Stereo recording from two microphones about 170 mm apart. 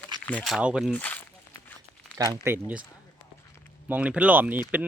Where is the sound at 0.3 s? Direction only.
5° left (ahead or behind).